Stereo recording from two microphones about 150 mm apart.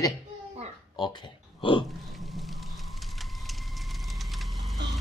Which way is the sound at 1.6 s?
35° left (ahead or behind).